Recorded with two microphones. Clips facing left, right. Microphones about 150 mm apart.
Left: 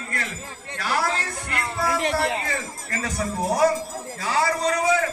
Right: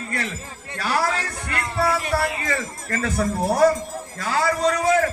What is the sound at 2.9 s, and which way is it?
A man's voice, 50° right (ahead or behind).